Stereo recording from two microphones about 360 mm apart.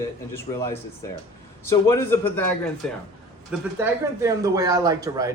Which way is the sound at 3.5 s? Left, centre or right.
Centre.